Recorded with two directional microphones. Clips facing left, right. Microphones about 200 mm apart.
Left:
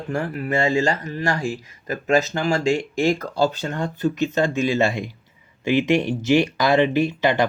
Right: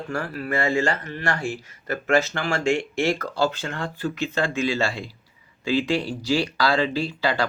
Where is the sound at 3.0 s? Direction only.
15° left (ahead or behind).